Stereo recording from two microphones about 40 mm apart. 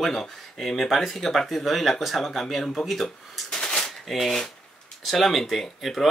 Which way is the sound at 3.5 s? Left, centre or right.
Centre.